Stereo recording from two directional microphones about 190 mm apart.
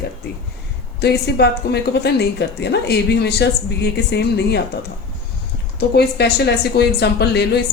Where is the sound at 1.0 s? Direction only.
60° left (ahead or behind).